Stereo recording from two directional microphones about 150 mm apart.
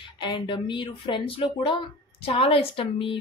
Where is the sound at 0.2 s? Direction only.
30° left (ahead or behind).